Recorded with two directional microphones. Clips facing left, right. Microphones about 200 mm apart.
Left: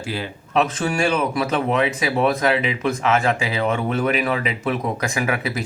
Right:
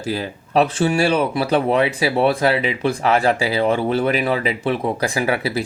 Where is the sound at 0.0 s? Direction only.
40° right (ahead or behind).